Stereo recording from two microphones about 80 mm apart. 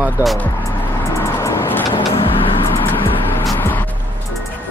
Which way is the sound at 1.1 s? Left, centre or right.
Left.